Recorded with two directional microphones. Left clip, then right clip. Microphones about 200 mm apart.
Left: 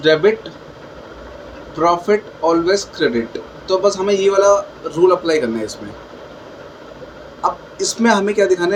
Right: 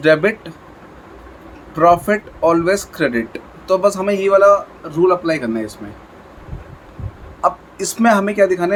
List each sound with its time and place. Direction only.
0.0 s speech: 40° right (ahead or behind)
1.7 s a man's voice: 40° right (ahead or behind); by 5.7 s 20° right (ahead or behind)
7.4 s a man's voice: 35° right (ahead or behind)